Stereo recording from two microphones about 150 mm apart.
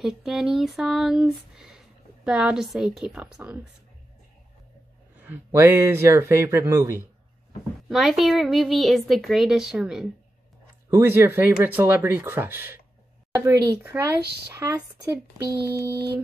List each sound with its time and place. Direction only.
0.0 s a woman's voice: centre (ahead or behind)
5.2 s speech: 15° right (ahead or behind)
7.9 s a woman's voice: centre (ahead or behind)
10.9 s speech: 15° right (ahead or behind)
14.2 s speech: 90° right
14.5 s speech: 20° right (ahead or behind)